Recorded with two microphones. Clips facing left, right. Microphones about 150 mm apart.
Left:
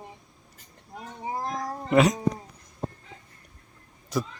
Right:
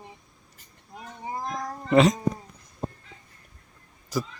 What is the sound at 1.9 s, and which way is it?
Speech, 10° left (ahead or behind).